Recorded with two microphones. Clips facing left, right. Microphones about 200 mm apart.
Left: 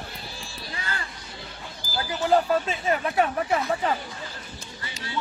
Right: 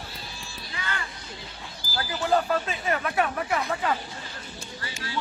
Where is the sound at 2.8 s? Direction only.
25° left (ahead or behind).